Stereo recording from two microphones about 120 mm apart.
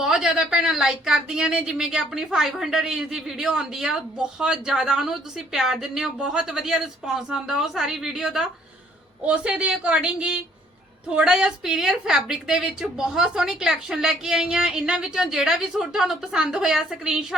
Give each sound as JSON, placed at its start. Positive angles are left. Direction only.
{"t": 0.0, "sound": "a woman's voice", "side_deg": -5}